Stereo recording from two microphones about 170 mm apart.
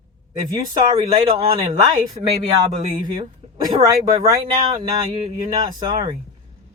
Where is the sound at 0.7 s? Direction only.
35° right (ahead or behind).